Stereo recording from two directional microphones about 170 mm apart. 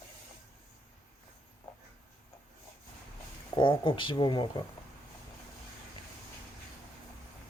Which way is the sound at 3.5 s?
30° left (ahead or behind).